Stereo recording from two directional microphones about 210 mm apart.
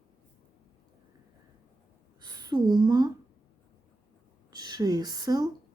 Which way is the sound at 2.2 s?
20° right (ahead or behind).